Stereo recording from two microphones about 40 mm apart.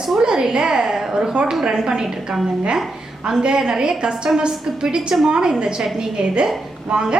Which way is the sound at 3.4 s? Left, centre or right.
Centre.